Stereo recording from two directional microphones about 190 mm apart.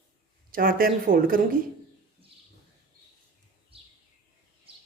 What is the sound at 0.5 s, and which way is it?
Speech, 50° right (ahead or behind).